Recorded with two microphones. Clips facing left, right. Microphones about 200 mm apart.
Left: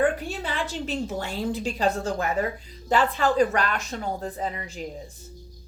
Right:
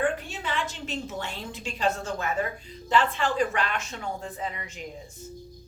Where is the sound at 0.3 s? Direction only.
35° left (ahead or behind).